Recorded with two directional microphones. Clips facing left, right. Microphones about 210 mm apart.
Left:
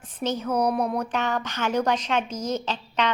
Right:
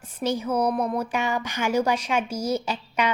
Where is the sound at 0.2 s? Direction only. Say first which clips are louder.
Right 1 dB; 10° right (ahead or behind).